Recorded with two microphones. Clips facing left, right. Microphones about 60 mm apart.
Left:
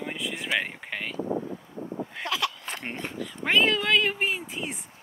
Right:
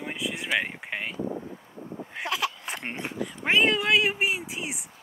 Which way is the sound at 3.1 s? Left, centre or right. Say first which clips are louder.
Even; right.